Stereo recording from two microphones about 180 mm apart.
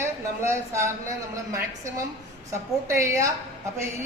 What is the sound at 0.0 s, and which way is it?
Speech, 15° right (ahead or behind).